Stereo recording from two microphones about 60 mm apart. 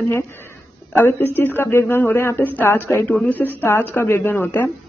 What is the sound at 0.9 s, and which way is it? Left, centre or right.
Speech, left.